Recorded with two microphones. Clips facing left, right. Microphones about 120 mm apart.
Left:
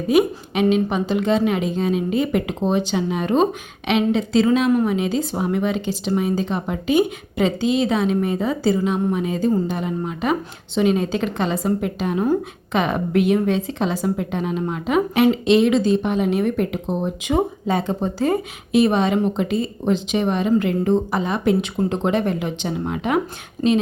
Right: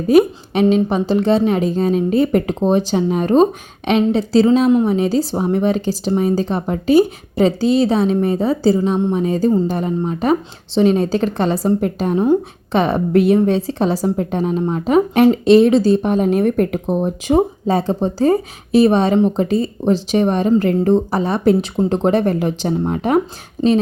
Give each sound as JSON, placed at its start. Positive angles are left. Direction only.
{"t": 0.1, "sound": "a woman's voice", "side_deg": -35}
{"t": 4.9, "sound": "a woman's voice", "side_deg": -35}
{"t": 17.2, "sound": "a woman's voice", "side_deg": -35}